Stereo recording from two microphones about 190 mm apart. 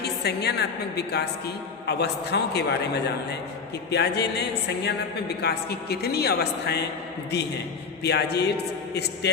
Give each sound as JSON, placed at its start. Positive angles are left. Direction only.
{"t": 0.0, "sound": "speech", "side_deg": 60}
{"t": 8.0, "sound": "a man's voice", "side_deg": 60}